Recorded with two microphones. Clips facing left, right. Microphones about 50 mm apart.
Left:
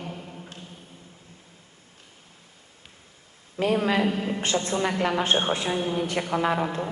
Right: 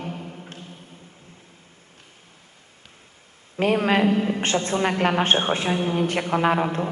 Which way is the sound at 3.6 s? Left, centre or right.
Right.